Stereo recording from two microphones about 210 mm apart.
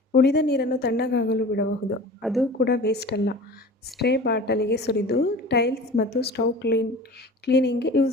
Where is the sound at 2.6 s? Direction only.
50° left (ahead or behind).